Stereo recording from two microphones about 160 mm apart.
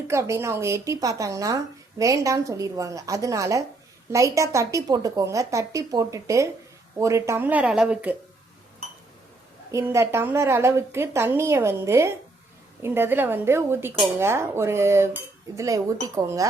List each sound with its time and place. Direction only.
0.1 s a woman's voice: 20° right (ahead or behind)
9.7 s a woman's voice: 15° right (ahead or behind)